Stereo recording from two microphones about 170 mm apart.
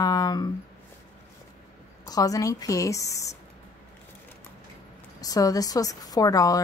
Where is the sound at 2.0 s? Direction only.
20° left (ahead or behind).